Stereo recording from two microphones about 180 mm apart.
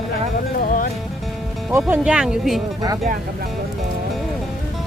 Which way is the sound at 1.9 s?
5° right (ahead or behind).